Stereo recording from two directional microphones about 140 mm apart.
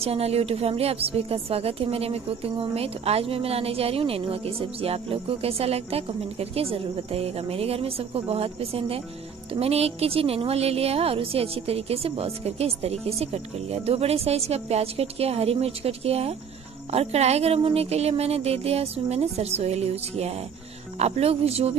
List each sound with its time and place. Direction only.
0.0 s a woman's voice: 45° right (ahead or behind)